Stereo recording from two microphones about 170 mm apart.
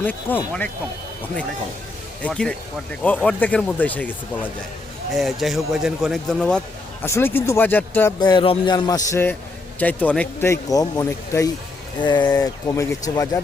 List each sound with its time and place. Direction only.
0.0 s speech: 10° left (ahead or behind)
2.2 s speech: 5° left (ahead or behind)
5.1 s speech: centre (ahead or behind)
7.0 s speech: 15° left (ahead or behind)
8.2 s speech: 25° left (ahead or behind)